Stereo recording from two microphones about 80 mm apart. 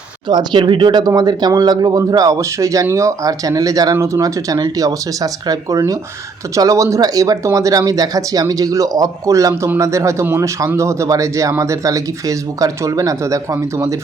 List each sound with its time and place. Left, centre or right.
0.3 s speech: right